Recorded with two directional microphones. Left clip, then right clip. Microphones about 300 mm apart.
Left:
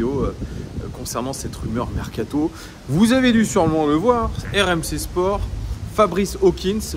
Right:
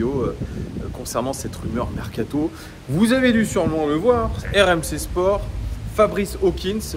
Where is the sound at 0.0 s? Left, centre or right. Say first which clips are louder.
Even; centre.